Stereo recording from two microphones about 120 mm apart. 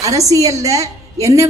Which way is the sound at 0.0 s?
30° right (ahead or behind).